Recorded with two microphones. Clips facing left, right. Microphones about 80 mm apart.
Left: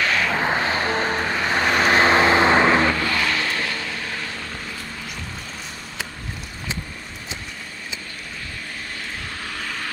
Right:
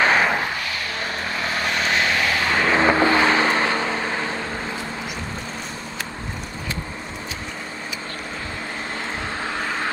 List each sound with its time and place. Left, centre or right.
0.0 s vehicle: right
0.4 s vehicle: left
2.8 s vehicle: right
9.4 s vehicle: right